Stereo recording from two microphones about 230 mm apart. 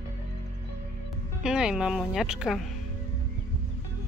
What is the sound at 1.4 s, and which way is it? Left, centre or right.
Speech, centre.